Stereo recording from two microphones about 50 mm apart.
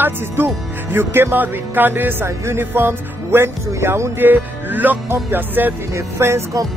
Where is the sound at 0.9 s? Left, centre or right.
Right.